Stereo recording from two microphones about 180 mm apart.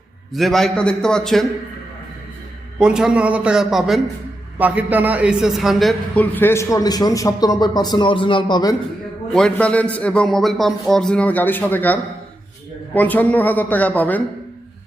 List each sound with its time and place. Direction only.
0.3 s speech: centre (ahead or behind)
2.7 s a man's voice: 5° right (ahead or behind); by 8.7 s 25° left (ahead or behind)
9.3 s a man's voice: 5° left (ahead or behind)